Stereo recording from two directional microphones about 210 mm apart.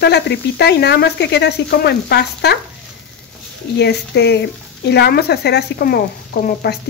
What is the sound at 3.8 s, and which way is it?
Speech, 55° left (ahead or behind).